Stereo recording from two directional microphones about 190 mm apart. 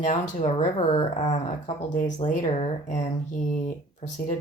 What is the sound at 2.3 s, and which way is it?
Speech, 40° left (ahead or behind).